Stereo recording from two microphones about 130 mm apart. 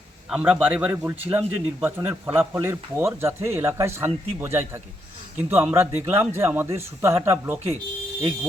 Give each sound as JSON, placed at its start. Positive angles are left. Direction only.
{"t": 0.3, "sound": "speech", "side_deg": -5}